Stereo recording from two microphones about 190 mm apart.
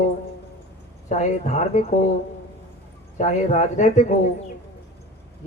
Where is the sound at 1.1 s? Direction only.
40° left (ahead or behind).